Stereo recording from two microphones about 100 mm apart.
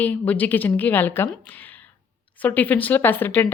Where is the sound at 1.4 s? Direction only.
20° left (ahead or behind).